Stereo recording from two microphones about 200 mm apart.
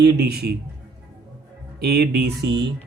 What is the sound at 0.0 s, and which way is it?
Speech, 55° right (ahead or behind).